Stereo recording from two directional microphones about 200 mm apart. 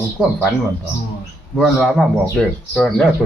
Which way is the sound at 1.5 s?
Centre (ahead or behind).